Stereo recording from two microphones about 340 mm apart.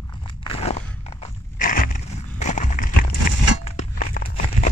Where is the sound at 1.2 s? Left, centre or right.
Left.